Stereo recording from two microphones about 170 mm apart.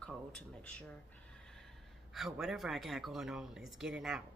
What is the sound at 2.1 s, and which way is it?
Speech, centre (ahead or behind).